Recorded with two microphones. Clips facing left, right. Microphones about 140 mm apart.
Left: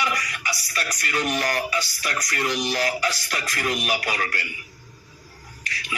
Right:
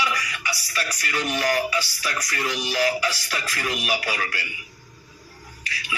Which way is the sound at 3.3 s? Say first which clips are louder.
Left 1 dB; 30° right (ahead or behind).